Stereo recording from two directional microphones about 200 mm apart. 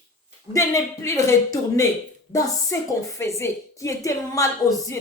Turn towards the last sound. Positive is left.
turn(degrees=20)  # may be behind; listen again after turning